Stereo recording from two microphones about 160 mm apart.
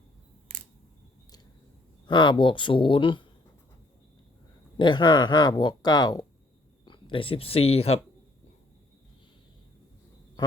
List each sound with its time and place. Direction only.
2.0 s speech: 30° left (ahead or behind)
4.8 s speech: 30° left (ahead or behind)